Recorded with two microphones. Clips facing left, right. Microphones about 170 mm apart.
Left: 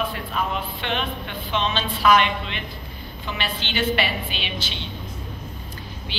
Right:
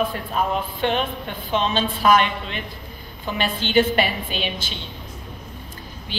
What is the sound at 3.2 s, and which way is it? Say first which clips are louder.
A woman's voice: right 5 dB; 45° right (ahead or behind).